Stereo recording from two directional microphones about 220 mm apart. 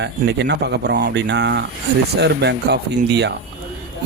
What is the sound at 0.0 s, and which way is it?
Speech, 50° right (ahead or behind).